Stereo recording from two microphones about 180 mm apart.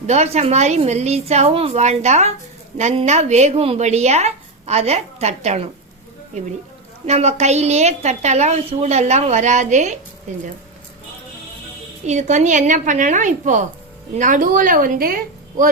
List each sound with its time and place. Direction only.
0.1 s a woman's voice: 40° right (ahead or behind)
7.0 s a woman's voice: 35° right (ahead or behind)
12.0 s a woman's voice: 40° right (ahead or behind)